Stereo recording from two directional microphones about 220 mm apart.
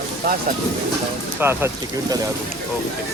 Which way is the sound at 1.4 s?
10° right (ahead or behind).